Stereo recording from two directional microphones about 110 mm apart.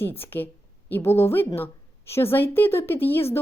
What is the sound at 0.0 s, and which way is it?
A woman's voice, 20° left (ahead or behind).